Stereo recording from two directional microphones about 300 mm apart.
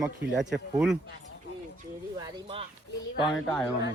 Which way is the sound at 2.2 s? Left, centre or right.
Centre.